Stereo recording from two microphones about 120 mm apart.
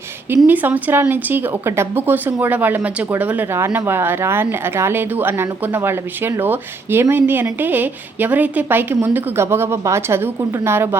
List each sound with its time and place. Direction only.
0.4 s speech: 15° right (ahead or behind)